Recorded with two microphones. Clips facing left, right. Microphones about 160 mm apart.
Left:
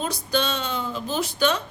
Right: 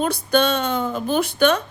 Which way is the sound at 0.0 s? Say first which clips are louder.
Right 6 dB; 55° right (ahead or behind).